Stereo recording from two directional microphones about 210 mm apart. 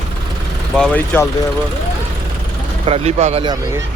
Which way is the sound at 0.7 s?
5° left (ahead or behind).